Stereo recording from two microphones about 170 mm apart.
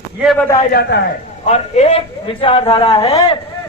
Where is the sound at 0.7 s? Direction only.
70° left (ahead or behind).